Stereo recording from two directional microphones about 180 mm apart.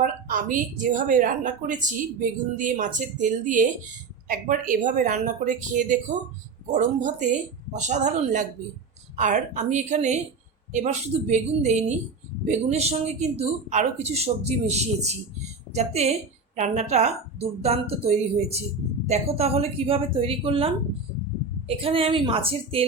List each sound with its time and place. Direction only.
0.0 s a woman's voice: 45° right (ahead or behind); by 22.9 s 30° right (ahead or behind)